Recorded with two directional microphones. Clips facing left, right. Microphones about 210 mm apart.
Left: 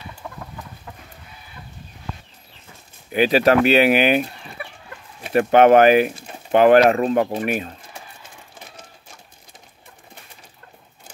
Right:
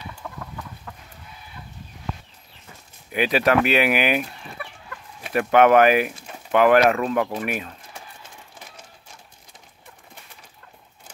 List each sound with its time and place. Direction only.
3.1 s speech: 30° left (ahead or behind)